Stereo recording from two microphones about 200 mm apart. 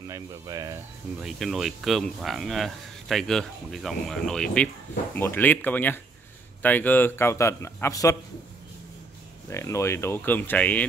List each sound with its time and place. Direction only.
0.1 s speech: 20° right (ahead or behind)
1.2 s a man's voice: centre (ahead or behind); by 8.2 s 15° left (ahead or behind)
9.5 s a man's voice: 15° left (ahead or behind)